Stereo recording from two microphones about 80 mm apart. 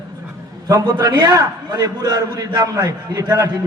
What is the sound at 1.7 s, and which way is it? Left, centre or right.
A man's voice, right.